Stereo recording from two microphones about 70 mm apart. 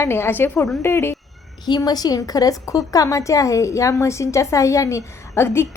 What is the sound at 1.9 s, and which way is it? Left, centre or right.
A woman's voice, left.